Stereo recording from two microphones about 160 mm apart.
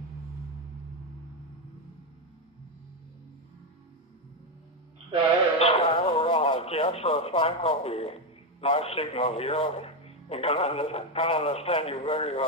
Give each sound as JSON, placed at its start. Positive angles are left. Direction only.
{"t": 5.6, "sound": "speech", "side_deg": 35}